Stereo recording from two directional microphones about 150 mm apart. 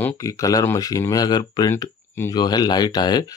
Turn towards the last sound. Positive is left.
turn(degrees=25)  # may be behind; listen again after turning